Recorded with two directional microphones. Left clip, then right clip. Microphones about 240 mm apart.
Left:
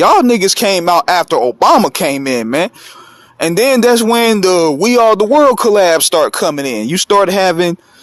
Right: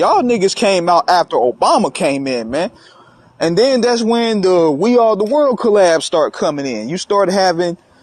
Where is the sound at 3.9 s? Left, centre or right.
Left.